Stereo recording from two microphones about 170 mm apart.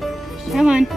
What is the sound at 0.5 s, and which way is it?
Speech, 5° right (ahead or behind).